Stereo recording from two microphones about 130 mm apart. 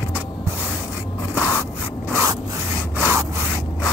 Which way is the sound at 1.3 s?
20° right (ahead or behind).